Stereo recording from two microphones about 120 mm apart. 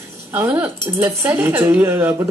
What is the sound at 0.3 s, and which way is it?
Speech, 20° right (ahead or behind).